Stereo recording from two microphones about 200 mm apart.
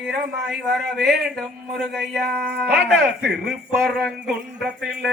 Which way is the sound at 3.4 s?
Centre (ahead or behind).